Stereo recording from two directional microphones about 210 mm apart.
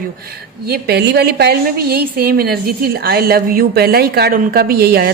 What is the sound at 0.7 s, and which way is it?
A woman's voice, 50° right (ahead or behind).